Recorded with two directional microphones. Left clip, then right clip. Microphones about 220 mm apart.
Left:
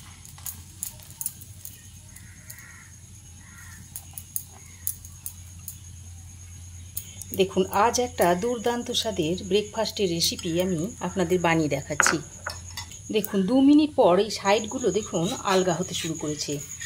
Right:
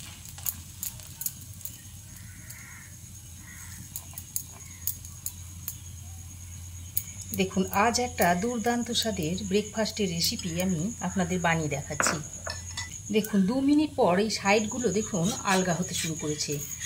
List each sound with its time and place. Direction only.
7.3 s speech: 30° left (ahead or behind)